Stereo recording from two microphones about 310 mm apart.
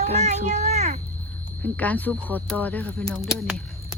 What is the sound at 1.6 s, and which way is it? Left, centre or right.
Speech, centre.